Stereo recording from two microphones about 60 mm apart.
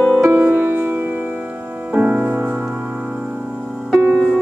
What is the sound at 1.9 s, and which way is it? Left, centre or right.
Music, right.